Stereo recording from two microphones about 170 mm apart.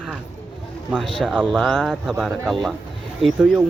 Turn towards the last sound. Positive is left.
turn(degrees=-5)  # may be behind; listen again after turning